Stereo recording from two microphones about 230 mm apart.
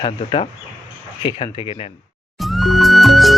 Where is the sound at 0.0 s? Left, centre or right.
Left.